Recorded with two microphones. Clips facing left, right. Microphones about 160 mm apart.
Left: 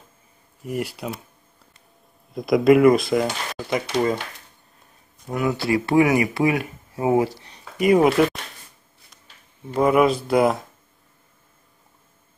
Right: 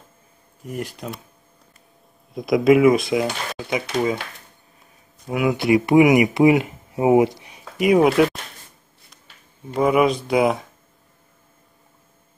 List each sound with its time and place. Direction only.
0.7 s speech: 5° left (ahead or behind)
2.3 s speech: centre (ahead or behind)
5.2 s speech: 10° right (ahead or behind)
9.8 s speech: centre (ahead or behind)